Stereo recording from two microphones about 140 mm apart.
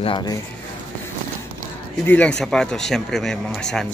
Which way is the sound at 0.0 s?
35° left (ahead or behind).